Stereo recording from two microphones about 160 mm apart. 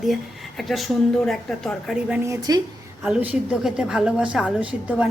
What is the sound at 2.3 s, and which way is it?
Speech, 25° right (ahead or behind).